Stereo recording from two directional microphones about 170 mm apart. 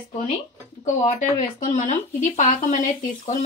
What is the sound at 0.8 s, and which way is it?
Speech, 45° left (ahead or behind).